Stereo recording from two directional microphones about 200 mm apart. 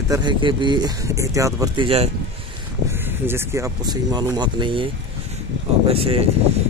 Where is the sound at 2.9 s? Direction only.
10° right (ahead or behind).